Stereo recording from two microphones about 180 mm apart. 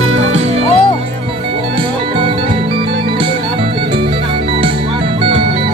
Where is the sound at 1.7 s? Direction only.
30° right (ahead or behind).